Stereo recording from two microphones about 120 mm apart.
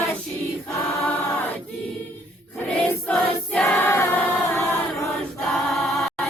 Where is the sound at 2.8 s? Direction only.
10° left (ahead or behind).